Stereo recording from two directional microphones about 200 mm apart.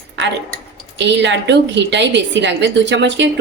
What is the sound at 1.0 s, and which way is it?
A woman's voice, 60° right (ahead or behind).